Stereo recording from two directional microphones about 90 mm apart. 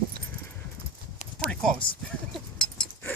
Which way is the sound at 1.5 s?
5° left (ahead or behind).